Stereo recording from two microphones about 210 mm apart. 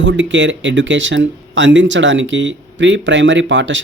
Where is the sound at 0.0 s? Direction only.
60° right (ahead or behind).